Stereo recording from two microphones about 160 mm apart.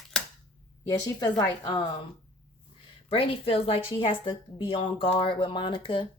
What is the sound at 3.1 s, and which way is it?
Speech, 35° left (ahead or behind).